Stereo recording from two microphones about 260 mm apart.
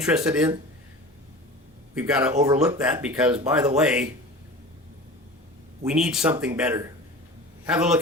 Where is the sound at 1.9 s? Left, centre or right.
Centre.